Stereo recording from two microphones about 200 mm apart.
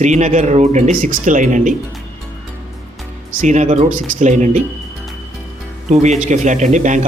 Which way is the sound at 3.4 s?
35° right (ahead or behind).